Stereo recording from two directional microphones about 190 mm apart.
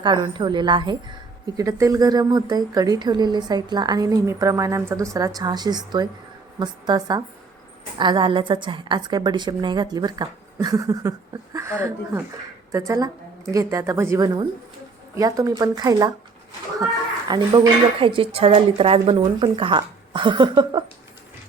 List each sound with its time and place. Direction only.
0.0 s a woman's voice: 25° right (ahead or behind)
17.2 s a woman's voice: 20° right (ahead or behind)